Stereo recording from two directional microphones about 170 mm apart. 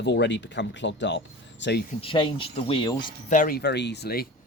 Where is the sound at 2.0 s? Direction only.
30° left (ahead or behind).